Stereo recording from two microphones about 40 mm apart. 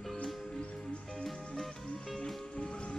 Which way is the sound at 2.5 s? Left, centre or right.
Left.